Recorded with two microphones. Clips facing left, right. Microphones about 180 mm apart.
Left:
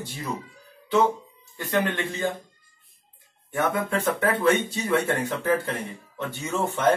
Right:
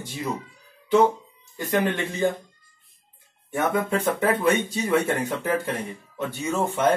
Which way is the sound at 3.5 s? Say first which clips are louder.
Right 2 dB; 25° right (ahead or behind).